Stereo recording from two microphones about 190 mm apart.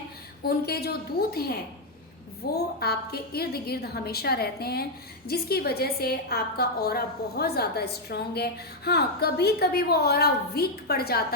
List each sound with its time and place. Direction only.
0.4 s a woman's voice: 55° left (ahead or behind)